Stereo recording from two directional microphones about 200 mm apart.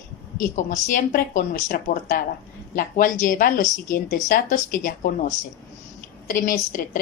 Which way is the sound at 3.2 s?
40° left (ahead or behind).